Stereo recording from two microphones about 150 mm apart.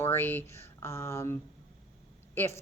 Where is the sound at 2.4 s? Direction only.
15° left (ahead or behind).